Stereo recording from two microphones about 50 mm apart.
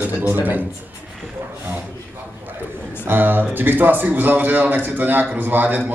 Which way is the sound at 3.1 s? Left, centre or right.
Right.